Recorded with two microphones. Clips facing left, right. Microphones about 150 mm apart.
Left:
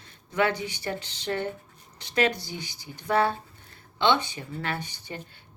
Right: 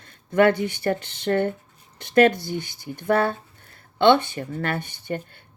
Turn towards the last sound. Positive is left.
turn(degrees=-55)  # may be behind; listen again after turning